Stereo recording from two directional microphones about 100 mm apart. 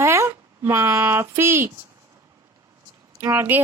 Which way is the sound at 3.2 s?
20° right (ahead or behind).